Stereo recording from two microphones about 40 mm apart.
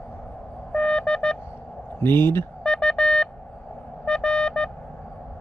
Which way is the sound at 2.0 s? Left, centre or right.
Left.